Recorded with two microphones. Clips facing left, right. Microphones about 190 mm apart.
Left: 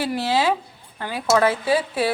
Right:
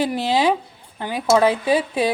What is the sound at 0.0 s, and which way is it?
Speech, 20° right (ahead or behind).